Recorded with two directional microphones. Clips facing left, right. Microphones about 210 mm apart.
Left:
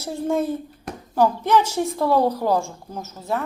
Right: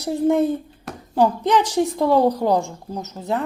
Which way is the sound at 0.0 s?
15° right (ahead or behind).